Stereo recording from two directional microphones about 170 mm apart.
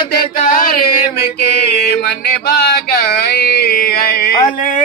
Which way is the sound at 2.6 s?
65° left (ahead or behind).